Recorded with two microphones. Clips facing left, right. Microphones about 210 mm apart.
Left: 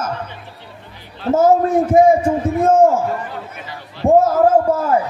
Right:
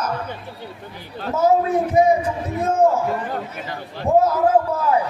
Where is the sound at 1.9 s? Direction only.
50° left (ahead or behind).